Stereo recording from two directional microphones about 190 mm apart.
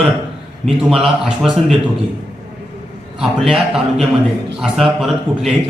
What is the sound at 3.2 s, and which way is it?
A man's voice, centre (ahead or behind).